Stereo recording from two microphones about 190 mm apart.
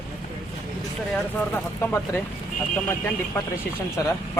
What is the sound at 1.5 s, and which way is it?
Speech, 10° left (ahead or behind).